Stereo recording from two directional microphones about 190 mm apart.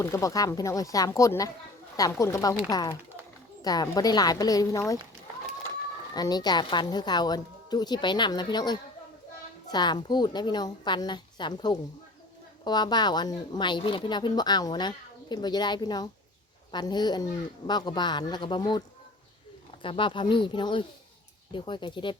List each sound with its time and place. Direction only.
0.0 s a woman's voice: 15° left (ahead or behind)
6.1 s a woman's voice: 20° left (ahead or behind)
19.8 s a woman's voice: 25° left (ahead or behind)